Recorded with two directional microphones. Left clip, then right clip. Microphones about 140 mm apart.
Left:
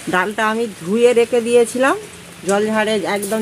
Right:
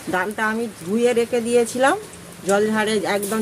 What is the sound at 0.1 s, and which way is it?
Speech, 70° left (ahead or behind).